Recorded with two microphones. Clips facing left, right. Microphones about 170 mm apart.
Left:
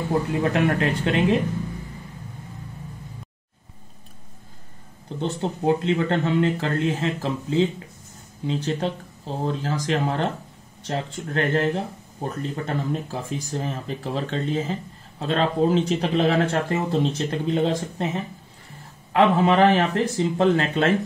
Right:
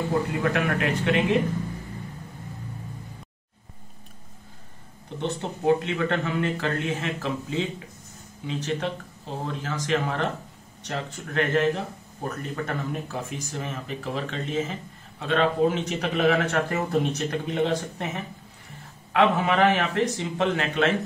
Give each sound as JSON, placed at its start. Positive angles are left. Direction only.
{"t": 0.4, "sound": "speech", "side_deg": 30}
{"t": 5.2, "sound": "speech", "side_deg": 35}